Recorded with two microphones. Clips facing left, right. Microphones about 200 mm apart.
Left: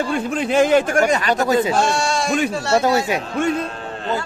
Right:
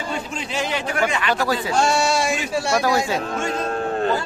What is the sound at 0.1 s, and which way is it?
Speech, 50° left (ahead or behind).